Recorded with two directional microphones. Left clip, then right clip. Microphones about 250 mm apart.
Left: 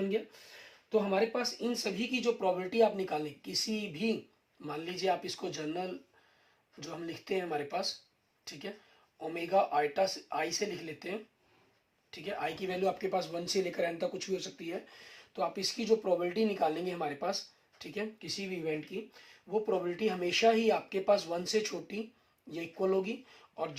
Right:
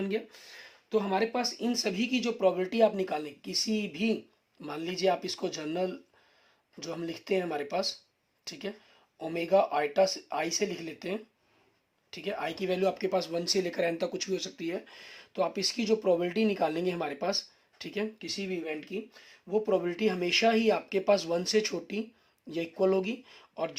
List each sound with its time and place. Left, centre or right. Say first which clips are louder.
0.0 s speech: right 1 dB; right